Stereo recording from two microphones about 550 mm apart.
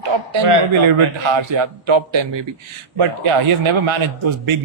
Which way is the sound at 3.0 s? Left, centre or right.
Right.